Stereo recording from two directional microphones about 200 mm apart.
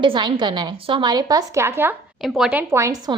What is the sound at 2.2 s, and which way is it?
A woman's voice, centre (ahead or behind).